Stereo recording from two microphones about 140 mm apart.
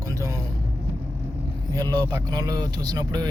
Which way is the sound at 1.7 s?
30° right (ahead or behind).